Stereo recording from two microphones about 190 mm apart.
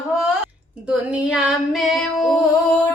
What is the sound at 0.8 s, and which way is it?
Female singing, 5° right (ahead or behind).